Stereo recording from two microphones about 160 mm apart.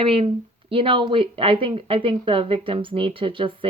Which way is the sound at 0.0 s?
35° right (ahead or behind).